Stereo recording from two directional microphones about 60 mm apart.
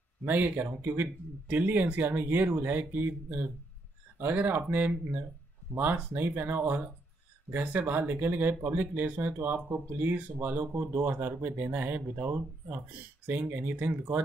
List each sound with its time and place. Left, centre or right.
0.2 s speech: right
4.2 s speech: right